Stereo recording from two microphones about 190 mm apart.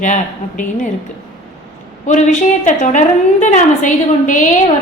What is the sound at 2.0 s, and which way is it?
A woman's voice, 40° left (ahead or behind).